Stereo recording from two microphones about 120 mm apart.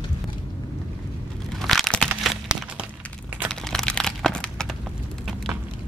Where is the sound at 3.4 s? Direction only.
5° left (ahead or behind).